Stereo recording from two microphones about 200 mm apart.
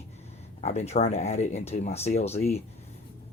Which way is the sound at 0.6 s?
35° left (ahead or behind).